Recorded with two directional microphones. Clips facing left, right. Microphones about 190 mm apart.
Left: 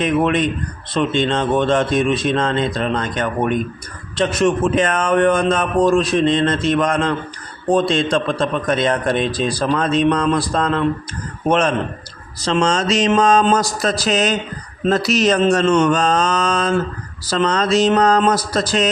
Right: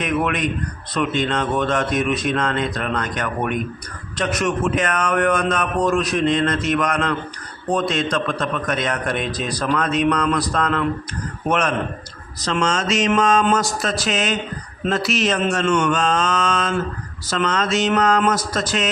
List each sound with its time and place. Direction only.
0.0 s a man's voice: 30° left (ahead or behind)